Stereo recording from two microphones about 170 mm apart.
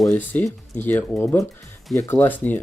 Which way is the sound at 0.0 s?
10° left (ahead or behind).